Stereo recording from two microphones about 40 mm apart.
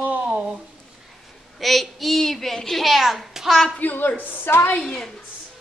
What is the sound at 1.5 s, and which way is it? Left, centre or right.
Speech, centre.